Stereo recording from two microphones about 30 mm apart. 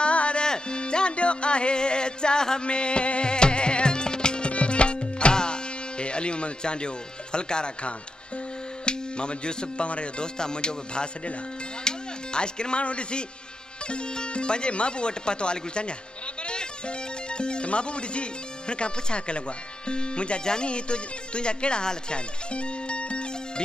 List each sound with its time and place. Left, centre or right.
0.0 s music: left
0.4 s music: left
2.6 s music: left
4.5 s music: left
8.8 s speech: left
9.8 s music: left
10.2 s music: left
17.3 s music: left
20.4 s speech: left